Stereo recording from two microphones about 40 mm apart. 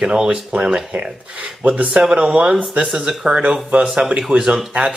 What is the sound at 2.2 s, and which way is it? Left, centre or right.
Speech, right.